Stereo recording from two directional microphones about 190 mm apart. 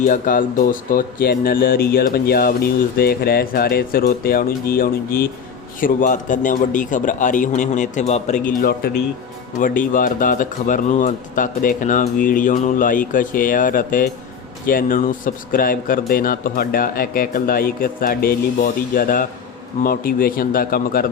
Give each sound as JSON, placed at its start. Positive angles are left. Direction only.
{"t": 0.0, "sound": "speech", "side_deg": 45}